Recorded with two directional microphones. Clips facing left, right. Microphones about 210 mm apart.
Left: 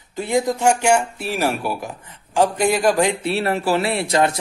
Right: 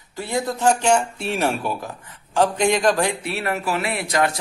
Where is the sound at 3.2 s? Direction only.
30° left (ahead or behind).